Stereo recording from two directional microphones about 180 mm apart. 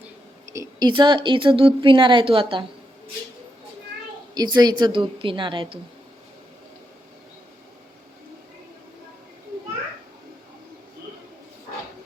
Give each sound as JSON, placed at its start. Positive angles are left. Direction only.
{"t": 0.5, "sound": "speech", "side_deg": -20}
{"t": 4.4, "sound": "speech", "side_deg": -25}